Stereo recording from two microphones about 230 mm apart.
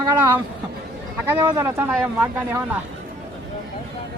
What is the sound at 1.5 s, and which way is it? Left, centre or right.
Speech, centre.